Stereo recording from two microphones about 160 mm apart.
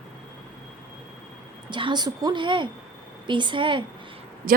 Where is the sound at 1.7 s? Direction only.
30° right (ahead or behind).